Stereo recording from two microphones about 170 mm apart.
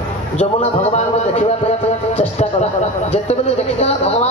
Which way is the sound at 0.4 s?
35° left (ahead or behind).